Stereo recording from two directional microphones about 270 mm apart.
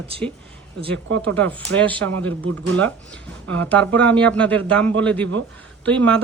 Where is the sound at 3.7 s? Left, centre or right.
Centre.